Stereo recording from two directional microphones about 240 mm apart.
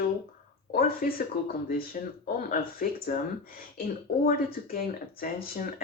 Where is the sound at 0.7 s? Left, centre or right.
Left.